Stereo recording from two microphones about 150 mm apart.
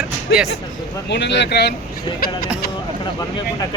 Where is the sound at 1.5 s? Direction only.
90° left.